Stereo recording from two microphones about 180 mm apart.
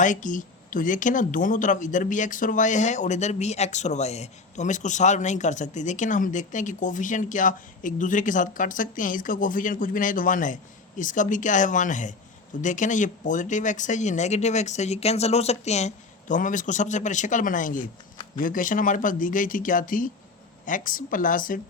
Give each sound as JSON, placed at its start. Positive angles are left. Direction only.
{"t": 0.0, "sound": "speech", "side_deg": 45}